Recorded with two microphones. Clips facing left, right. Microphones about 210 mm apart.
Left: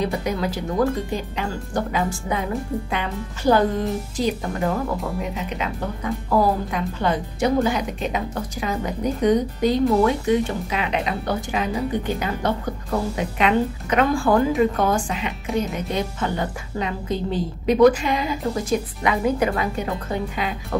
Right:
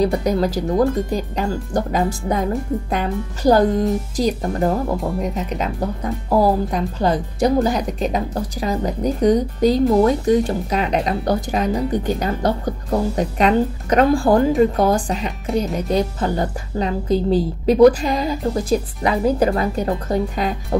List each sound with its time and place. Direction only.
0.0 s speech: 40° right (ahead or behind)